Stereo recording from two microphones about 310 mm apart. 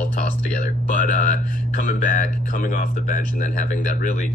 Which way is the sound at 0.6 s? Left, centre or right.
Left.